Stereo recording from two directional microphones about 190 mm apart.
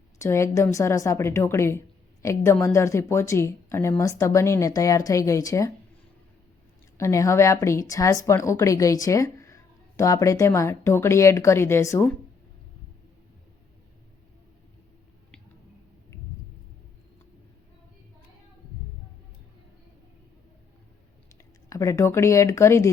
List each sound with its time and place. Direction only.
0.2 s a woman's voice: 15° left (ahead or behind)
6.9 s a woman's voice: 15° left (ahead or behind)
21.7 s a woman's voice: 15° left (ahead or behind)